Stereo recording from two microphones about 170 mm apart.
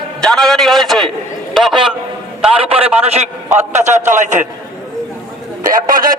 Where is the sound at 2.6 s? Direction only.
35° right (ahead or behind).